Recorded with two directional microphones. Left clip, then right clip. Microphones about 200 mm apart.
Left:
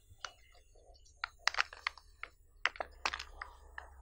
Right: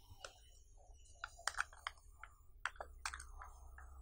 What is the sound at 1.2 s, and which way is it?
Computer keyboard, 20° left (ahead or behind).